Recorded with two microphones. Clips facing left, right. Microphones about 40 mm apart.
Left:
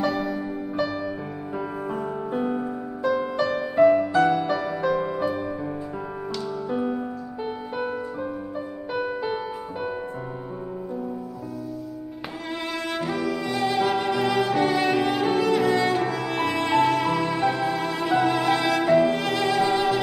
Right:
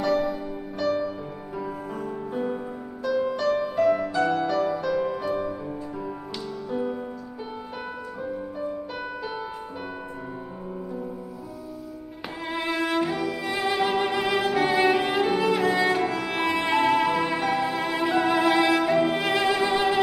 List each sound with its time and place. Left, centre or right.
0.0 s music: centre
2.3 s music: centre
8.2 s music: centre
12.4 s music: centre